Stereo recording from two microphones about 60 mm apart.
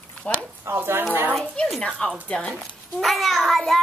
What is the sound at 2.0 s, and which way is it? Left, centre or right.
Speech, centre.